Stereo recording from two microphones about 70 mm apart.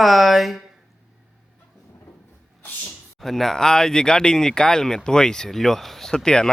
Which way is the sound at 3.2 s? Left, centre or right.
Centre.